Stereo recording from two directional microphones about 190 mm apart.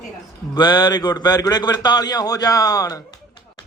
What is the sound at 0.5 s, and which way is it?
A man's voice, 25° left (ahead or behind).